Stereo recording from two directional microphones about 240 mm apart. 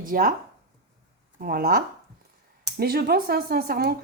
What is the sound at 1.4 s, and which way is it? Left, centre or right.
A woman's voice, right.